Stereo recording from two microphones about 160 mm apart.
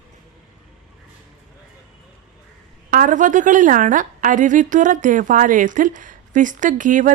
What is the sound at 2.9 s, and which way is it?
A woman's voice, 55° right (ahead or behind).